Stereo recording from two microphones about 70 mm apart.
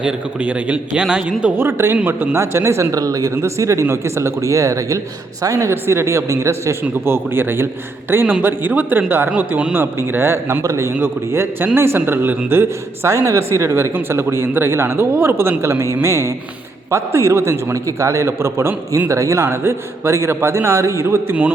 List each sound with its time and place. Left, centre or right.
0.0 s speech: centre
1.5 s a man's voice: right
2.9 s speech: right
3.3 s speech: right
5.7 s a man's voice: right